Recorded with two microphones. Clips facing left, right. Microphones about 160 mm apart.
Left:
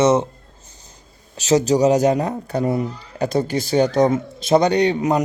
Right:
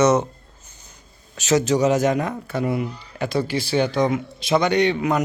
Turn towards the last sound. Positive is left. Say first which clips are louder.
# left 2 dB
turn(degrees=40)  # may be behind; listen again after turning